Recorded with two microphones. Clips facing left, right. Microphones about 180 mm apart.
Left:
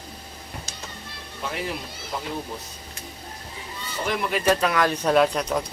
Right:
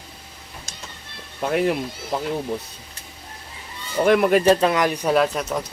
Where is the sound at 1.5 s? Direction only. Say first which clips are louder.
Right 10 dB; 55° right (ahead or behind).